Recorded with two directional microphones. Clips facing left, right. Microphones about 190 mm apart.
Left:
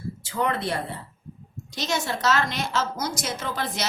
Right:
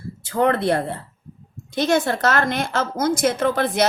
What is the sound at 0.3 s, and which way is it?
Speech, 60° right (ahead or behind).